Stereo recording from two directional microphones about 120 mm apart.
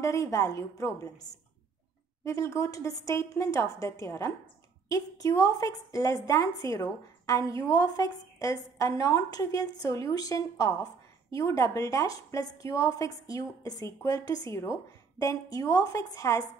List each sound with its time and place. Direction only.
0.0 s a woman's voice: 25° left (ahead or behind)